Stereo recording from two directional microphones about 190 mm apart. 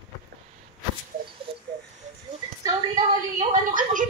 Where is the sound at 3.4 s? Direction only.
45° right (ahead or behind).